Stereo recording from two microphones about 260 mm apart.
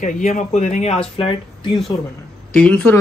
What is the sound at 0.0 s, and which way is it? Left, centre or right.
A man's voice, left.